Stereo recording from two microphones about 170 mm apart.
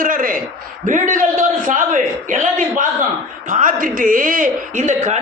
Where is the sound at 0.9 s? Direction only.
50° right (ahead or behind).